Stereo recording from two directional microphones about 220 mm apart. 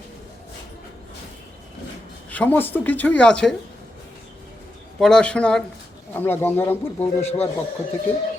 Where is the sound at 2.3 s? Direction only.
10° left (ahead or behind).